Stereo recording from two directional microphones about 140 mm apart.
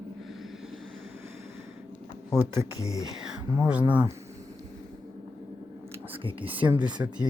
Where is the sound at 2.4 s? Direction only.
20° right (ahead or behind).